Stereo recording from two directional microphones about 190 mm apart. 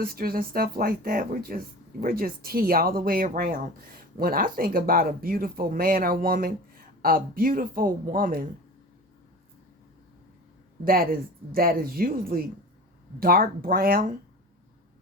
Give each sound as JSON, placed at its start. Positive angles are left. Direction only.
{"t": 0.0, "sound": "speech", "side_deg": -50}
{"t": 10.8, "sound": "speech", "side_deg": -50}